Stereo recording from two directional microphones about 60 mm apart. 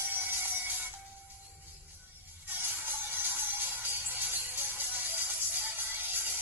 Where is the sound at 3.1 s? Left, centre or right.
Right.